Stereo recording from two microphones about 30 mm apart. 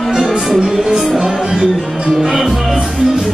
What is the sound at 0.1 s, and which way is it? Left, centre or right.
Music, centre.